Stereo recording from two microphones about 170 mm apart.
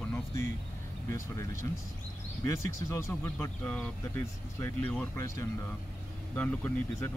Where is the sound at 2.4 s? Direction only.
15° left (ahead or behind).